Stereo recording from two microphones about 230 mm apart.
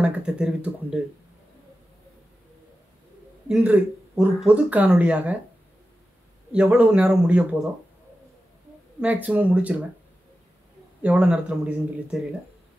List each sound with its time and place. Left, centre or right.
0.0 s speech: centre
3.4 s speech: centre
6.5 s speech: centre
9.0 s speech: centre
11.0 s speech: centre